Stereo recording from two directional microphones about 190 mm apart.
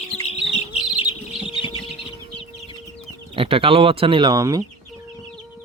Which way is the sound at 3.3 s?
30° right (ahead or behind).